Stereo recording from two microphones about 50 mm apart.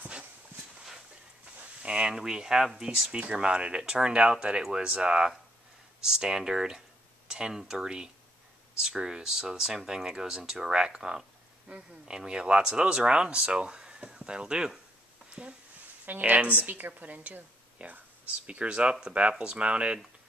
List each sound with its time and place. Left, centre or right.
0.0 s dog: right
1.8 s speech: centre
3.1 s a woman's voice: right
18.5 s speech: right